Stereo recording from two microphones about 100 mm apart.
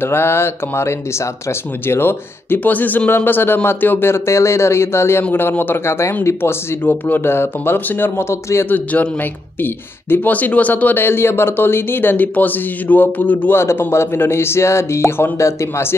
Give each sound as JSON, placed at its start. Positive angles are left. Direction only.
{"t": 0.0, "sound": "speech", "side_deg": 20}